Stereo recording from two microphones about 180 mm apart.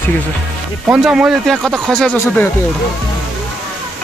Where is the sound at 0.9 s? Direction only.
5° right (ahead or behind).